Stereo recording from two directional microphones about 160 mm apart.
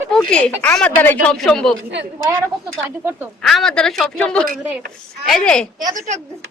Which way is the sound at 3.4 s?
Centre (ahead or behind).